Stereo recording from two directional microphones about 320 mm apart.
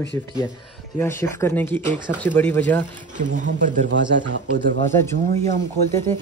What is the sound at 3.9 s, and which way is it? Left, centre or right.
Speech, right.